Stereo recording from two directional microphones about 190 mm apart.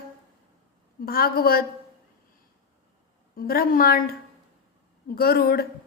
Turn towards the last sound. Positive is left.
turn(degrees=55)  # may be behind; listen again after turning